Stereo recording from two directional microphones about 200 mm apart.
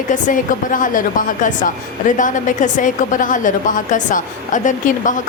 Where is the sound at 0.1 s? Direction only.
40° left (ahead or behind).